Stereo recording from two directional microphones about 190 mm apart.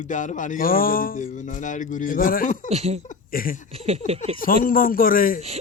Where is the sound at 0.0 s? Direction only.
40° left (ahead or behind).